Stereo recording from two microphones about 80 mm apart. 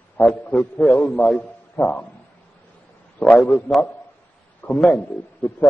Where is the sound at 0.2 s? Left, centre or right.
Left.